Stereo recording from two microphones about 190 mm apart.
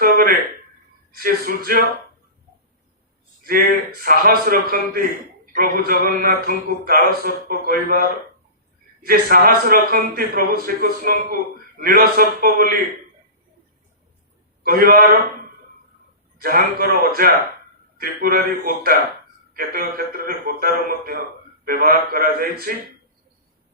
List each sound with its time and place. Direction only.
0.0 s a sound: 50° right (ahead or behind)
1.1 s a man's voice: 50° right (ahead or behind)
3.4 s a man's voice: 50° right (ahead or behind)
9.0 s a man's voice: 50° right (ahead or behind)
14.6 s a man's voice: 50° right (ahead or behind)
16.4 s a man's voice: 50° right (ahead or behind)